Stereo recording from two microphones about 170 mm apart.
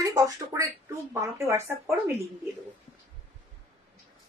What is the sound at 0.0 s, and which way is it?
Speech, 20° right (ahead or behind).